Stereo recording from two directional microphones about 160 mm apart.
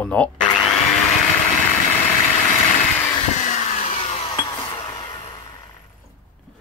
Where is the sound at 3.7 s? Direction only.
40° left (ahead or behind).